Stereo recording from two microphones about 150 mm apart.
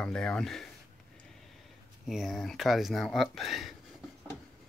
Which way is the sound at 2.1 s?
Centre (ahead or behind).